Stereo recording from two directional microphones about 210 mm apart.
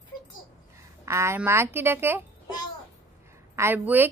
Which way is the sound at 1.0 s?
15° right (ahead or behind).